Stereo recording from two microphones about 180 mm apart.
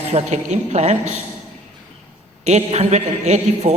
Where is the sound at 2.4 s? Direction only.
40° right (ahead or behind).